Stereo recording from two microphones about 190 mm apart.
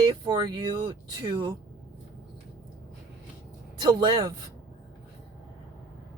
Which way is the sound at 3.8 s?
20° right (ahead or behind).